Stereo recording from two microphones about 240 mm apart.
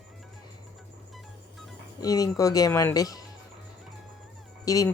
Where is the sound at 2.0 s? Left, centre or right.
Centre.